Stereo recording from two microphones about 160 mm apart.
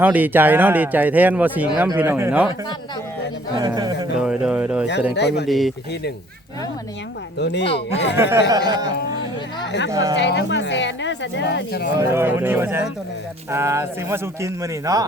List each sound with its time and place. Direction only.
0.0 s speech: 10° right (ahead or behind)
3.7 s speech: 25° right (ahead or behind)
4.2 s speech: 5° right (ahead or behind)
5.1 s speech: 90° left
5.5 s speech: centre (ahead or behind)
7.3 s speech: 90° left
8.1 s speech: 15° right (ahead or behind)
8.4 s speech: 25° right (ahead or behind)
9.9 s speech: 20° right (ahead or behind)
10.2 s speech: 90° left
11.9 s speech: 15° right (ahead or behind)